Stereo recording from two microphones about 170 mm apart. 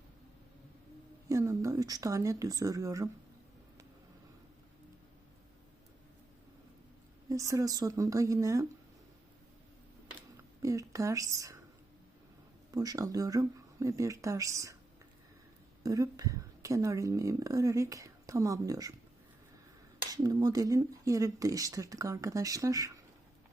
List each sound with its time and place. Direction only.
1.3 s speech: 20° right (ahead or behind)
7.3 s speech: 20° right (ahead or behind)
10.6 s speech: 20° right (ahead or behind)
12.7 s speech: 20° right (ahead or behind)
15.8 s speech: 20° right (ahead or behind)
20.0 s speech: 25° right (ahead or behind)